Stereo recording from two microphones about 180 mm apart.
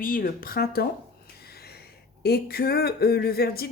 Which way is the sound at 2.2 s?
60° left (ahead or behind).